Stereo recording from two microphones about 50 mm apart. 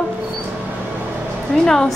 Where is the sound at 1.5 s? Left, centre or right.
Centre.